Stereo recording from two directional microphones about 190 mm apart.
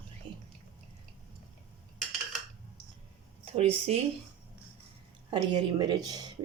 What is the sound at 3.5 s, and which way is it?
Speech, 30° right (ahead or behind).